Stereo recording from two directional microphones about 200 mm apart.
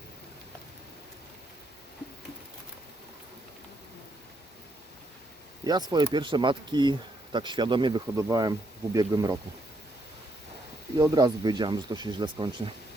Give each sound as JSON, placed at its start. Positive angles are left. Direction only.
{"t": 5.6, "sound": "speech", "side_deg": -20}
{"t": 10.9, "sound": "speech", "side_deg": -20}